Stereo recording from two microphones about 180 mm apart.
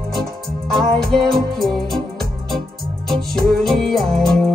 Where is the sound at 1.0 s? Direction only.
Centre (ahead or behind).